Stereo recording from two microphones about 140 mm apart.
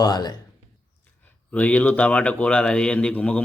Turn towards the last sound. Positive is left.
turn(degrees=10)  # may be behind; listen again after turning